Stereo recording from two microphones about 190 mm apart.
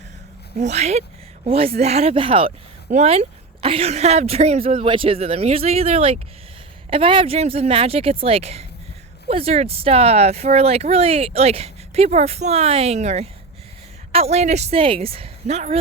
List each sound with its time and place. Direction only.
0.6 s speech: 35° right (ahead or behind)